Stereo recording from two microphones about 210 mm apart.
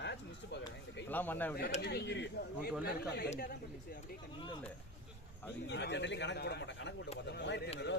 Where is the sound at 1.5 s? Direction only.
45° left (ahead or behind).